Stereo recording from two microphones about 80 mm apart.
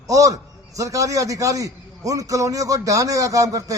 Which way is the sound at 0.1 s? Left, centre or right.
Right.